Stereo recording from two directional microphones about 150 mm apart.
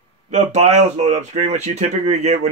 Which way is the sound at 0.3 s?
50° right (ahead or behind).